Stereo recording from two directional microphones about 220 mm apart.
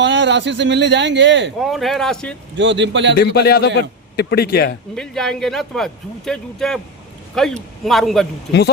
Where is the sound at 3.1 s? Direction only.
45° left (ahead or behind).